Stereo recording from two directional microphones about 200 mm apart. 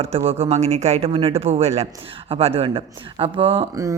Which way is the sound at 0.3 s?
30° right (ahead or behind).